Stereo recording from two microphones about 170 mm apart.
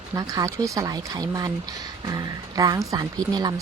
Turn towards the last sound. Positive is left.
turn(degrees=-25)  # may be behind; listen again after turning